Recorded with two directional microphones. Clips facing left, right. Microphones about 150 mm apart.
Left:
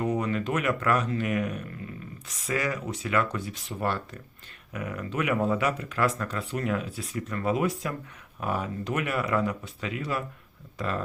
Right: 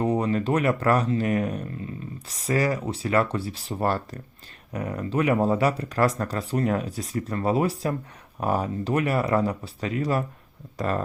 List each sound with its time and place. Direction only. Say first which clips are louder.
0.0 s speech: right 4 dB; 30° right (ahead or behind)